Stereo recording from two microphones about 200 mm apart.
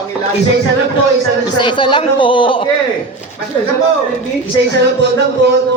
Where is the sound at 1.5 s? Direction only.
25° left (ahead or behind).